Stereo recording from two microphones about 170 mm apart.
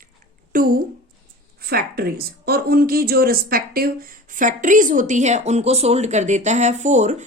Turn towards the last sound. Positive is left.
turn(degrees=-45)  # may be behind; listen again after turning